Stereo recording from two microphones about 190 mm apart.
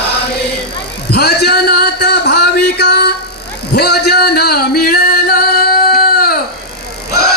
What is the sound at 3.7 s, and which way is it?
Music, 60° left (ahead or behind).